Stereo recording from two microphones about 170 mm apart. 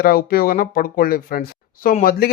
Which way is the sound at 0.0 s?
60° left (ahead or behind).